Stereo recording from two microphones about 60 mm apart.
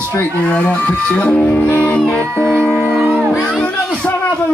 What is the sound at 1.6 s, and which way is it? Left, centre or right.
Music, left.